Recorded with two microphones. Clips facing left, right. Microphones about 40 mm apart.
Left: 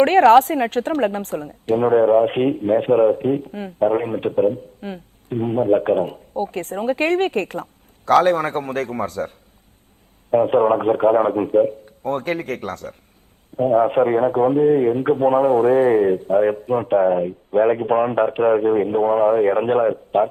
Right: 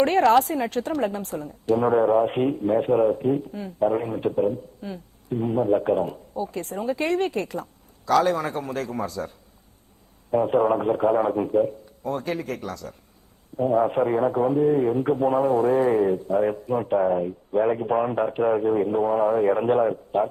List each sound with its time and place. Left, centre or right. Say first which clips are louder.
0.0 s a woman's voice: left 6 dB; left
10.3 s a man's voice: left 5 dB; left